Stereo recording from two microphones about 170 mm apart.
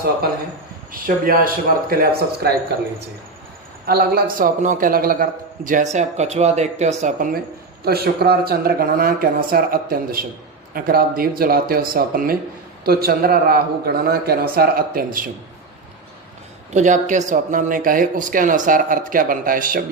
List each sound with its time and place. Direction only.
1.0 s a man's voice: 60° right (ahead or behind)
3.8 s a man's voice: 65° right (ahead or behind); by 7.3 s 45° right (ahead or behind)
7.9 s a man's voice: 65° right (ahead or behind)
16.7 s a man's voice: 45° right (ahead or behind)